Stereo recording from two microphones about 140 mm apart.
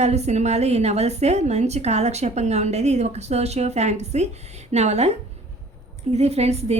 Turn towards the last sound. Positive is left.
turn(degrees=-50)  # may be behind; listen again after turning